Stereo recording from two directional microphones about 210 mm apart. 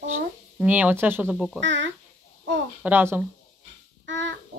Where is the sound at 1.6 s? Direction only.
60° right (ahead or behind).